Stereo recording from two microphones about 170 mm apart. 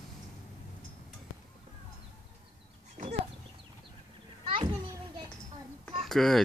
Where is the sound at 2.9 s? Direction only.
45° right (ahead or behind).